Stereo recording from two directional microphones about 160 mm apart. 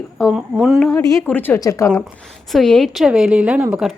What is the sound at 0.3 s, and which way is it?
Speech, 5° right (ahead or behind).